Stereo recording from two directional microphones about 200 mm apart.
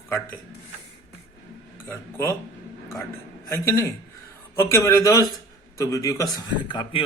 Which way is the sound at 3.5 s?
15° left (ahead or behind).